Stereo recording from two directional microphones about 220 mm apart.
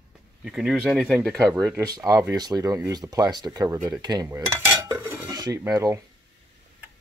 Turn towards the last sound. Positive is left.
turn(degrees=-15)  # may be behind; listen again after turning